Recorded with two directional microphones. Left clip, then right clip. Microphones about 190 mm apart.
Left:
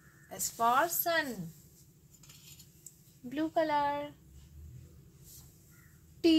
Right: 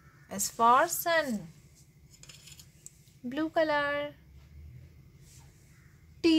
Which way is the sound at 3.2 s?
30° right (ahead or behind).